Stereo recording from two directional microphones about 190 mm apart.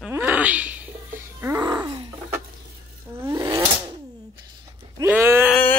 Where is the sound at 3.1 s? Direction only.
15° right (ahead or behind).